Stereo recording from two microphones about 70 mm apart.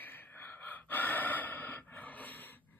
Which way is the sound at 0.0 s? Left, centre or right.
Left.